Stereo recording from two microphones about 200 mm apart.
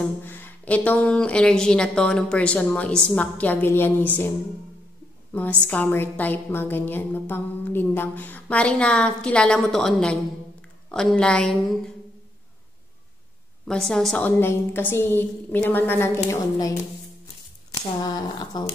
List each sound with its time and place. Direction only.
0.2 s speech: 10° left (ahead or behind)
5.3 s a woman's voice: 10° left (ahead or behind)
13.7 s a woman's voice: 5° left (ahead or behind)
18.0 s speech: 20° left (ahead or behind)